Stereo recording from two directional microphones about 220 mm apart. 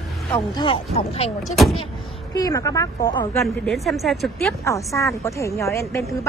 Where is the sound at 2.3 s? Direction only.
15° left (ahead or behind).